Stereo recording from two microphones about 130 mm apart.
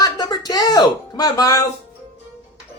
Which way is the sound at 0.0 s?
30° left (ahead or behind).